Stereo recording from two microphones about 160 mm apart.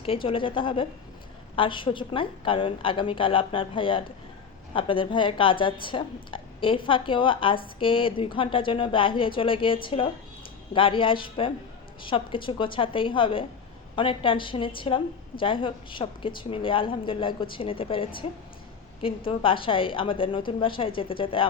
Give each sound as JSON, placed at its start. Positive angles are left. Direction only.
{"t": 0.0, "sound": "a woman's voice", "side_deg": 35}